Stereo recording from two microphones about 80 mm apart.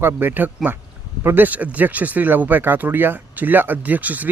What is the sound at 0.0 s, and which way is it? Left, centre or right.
Speech, right.